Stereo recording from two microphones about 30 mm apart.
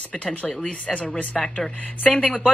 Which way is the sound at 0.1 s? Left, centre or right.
Left.